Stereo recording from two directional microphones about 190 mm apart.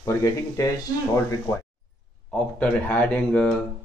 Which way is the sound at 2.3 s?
5° left (ahead or behind).